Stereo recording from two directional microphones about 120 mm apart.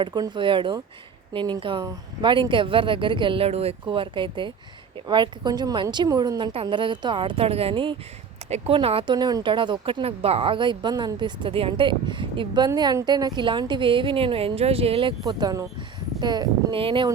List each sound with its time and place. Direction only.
0.0 s a woman's voice: 40° right (ahead or behind)
6.5 s a woman's voice: 50° right (ahead or behind)
8.4 s speech: 65° right (ahead or behind)
8.7 s a woman's voice: 50° right (ahead or behind)
9.1 s a woman's voice: 35° right (ahead or behind); by 15.1 s 55° right (ahead or behind)
15.2 s a woman's voice: 35° right (ahead or behind)